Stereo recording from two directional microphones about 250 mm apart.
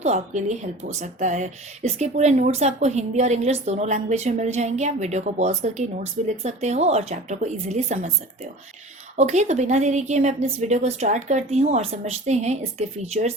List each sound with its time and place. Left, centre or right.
0.0 s speech: right
9.1 s speech: right